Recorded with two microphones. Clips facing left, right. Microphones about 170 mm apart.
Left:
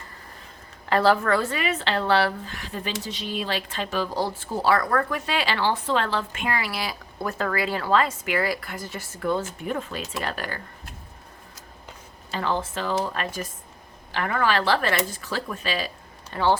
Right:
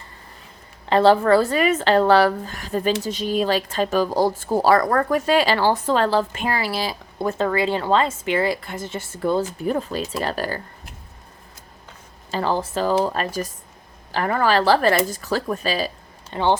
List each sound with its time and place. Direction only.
0.9 s a woman's voice: 25° right (ahead or behind)
12.3 s a woman's voice: 35° right (ahead or behind)
16.3 s speech: 20° right (ahead or behind)